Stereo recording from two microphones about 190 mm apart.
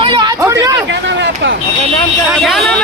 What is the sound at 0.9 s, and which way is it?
Speech, 70° right (ahead or behind).